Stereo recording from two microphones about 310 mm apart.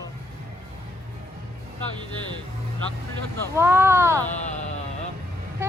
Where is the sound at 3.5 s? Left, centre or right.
Centre.